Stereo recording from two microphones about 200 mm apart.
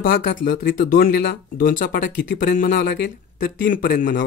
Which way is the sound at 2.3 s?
45° left (ahead or behind).